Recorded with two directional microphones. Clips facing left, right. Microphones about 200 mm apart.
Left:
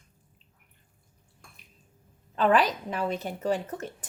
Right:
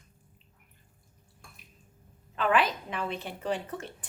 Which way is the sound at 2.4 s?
35° left (ahead or behind).